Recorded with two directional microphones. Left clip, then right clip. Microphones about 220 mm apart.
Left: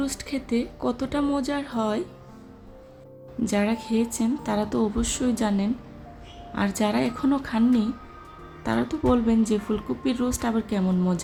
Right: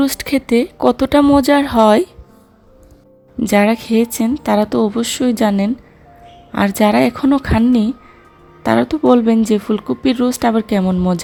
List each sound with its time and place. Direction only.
0.0 s speech: 35° right (ahead or behind)
3.4 s speech: 35° right (ahead or behind)